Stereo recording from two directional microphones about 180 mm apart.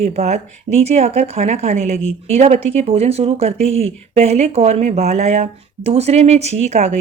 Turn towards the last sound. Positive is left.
turn(degrees=-40)  # may be behind; listen again after turning